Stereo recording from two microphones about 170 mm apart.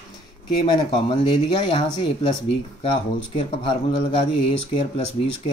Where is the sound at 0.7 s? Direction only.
25° left (ahead or behind).